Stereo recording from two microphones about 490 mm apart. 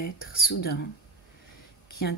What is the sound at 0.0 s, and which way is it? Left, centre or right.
Speech, centre.